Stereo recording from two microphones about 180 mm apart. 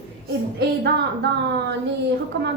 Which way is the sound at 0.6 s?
70° right (ahead or behind).